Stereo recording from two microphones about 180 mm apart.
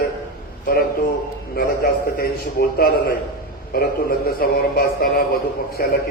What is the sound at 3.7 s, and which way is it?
A man's voice, 55° left (ahead or behind).